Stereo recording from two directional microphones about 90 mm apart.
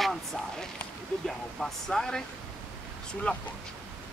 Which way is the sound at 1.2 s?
5° left (ahead or behind).